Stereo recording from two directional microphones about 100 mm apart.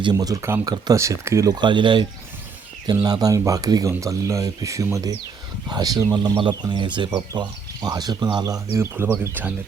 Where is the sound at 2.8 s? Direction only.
45° right (ahead or behind).